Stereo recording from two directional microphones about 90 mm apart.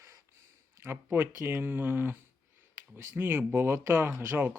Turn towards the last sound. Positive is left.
turn(degrees=-25)  # may be behind; listen again after turning